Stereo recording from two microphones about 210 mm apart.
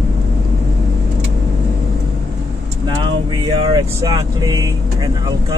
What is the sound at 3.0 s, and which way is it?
Speech, 20° right (ahead or behind).